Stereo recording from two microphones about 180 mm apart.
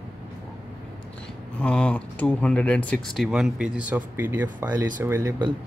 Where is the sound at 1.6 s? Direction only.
5° left (ahead or behind).